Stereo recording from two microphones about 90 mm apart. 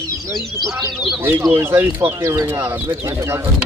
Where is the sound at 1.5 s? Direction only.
25° right (ahead or behind).